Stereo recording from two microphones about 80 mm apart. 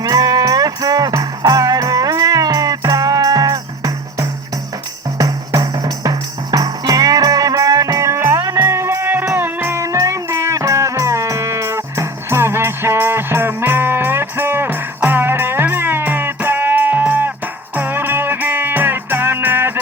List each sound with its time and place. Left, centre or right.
0.0 s music: right